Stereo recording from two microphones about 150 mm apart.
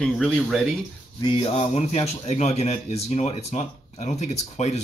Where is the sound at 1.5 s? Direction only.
45° left (ahead or behind).